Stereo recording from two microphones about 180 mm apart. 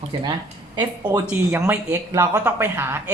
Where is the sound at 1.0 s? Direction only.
15° right (ahead or behind).